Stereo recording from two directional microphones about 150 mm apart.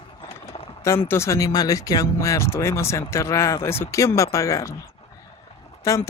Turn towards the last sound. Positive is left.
turn(degrees=20)  # may be behind; listen again after turning